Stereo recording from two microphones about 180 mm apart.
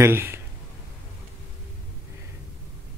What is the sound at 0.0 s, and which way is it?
Speech, 15° right (ahead or behind).